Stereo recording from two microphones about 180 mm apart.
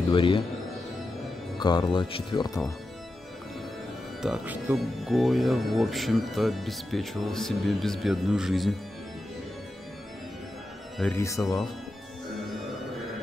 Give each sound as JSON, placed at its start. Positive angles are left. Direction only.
{"t": 0.1, "sound": "speech", "side_deg": 30}
{"t": 1.6, "sound": "speech", "side_deg": 25}
{"t": 4.2, "sound": "speech", "side_deg": -5}
{"t": 11.0, "sound": "speech", "side_deg": 10}